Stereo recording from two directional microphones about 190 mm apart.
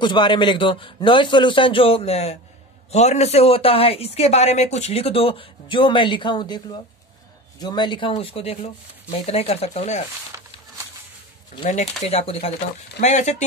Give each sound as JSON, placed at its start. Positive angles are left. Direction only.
{"t": 0.0, "sound": "a man's voice", "side_deg": 25}
{"t": 10.3, "sound": "a sound", "side_deg": -15}
{"t": 11.6, "sound": "speech", "side_deg": 35}